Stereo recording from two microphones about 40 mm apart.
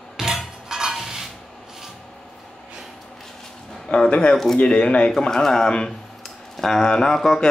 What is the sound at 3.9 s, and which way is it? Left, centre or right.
Speech, left.